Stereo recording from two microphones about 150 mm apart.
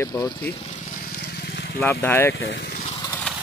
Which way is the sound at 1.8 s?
15° left (ahead or behind).